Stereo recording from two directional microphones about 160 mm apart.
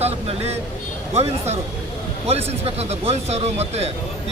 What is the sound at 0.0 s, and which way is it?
Speech, 40° right (ahead or behind).